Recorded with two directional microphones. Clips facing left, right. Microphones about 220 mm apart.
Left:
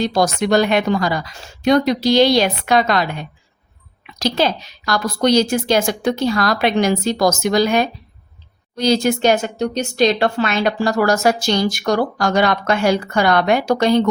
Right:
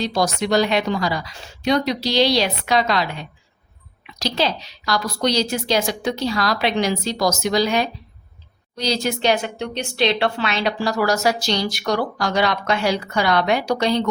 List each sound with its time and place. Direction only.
0.0 s speech: 50° left (ahead or behind)